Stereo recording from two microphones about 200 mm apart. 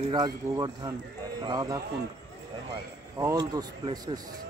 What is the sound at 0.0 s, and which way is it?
Speech, 20° right (ahead or behind).